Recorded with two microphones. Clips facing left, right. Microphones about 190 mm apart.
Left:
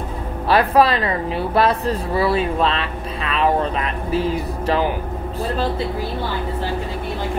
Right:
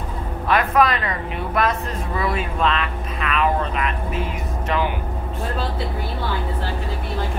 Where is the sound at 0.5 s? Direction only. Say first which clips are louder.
Left 3 dB; 30° left (ahead or behind).